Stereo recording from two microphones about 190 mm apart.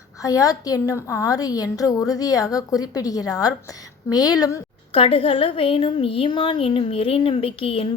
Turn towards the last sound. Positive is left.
turn(degrees=30)  # may be behind; listen again after turning